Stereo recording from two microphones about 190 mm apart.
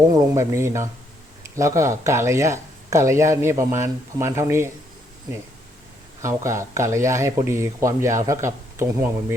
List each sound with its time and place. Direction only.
0.1 s speech: 15° right (ahead or behind)
6.2 s speech: 15° right (ahead or behind)